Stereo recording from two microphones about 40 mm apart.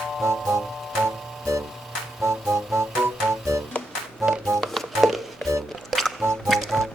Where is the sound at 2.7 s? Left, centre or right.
Right.